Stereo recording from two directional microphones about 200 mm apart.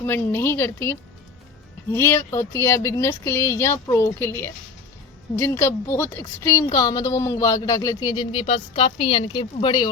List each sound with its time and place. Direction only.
0.0 s a woman's voice: 10° left (ahead or behind)